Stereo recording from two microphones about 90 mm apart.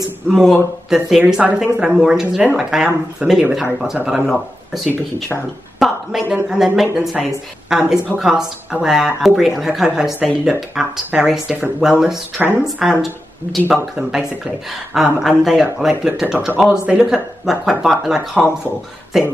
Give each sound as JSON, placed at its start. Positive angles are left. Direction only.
{"t": 0.3, "sound": "speech", "side_deg": -5}
{"t": 5.8, "sound": "speech", "side_deg": 0}
{"t": 12.4, "sound": "speech", "side_deg": -20}
{"t": 12.7, "sound": "speech", "side_deg": -5}